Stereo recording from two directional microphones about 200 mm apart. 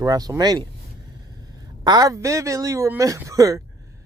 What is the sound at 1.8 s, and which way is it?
Speech, 20° right (ahead or behind).